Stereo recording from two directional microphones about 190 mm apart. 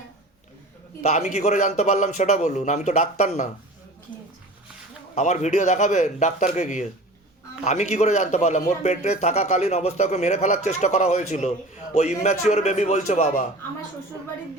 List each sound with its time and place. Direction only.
1.0 s a man's voice: 35° left (ahead or behind)
5.1 s a man's voice: 40° left (ahead or behind)